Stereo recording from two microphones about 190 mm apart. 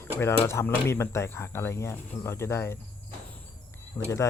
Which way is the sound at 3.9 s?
10° left (ahead or behind).